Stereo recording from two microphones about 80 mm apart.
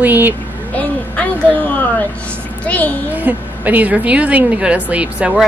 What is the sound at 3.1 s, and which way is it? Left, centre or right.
A woman's voice, right.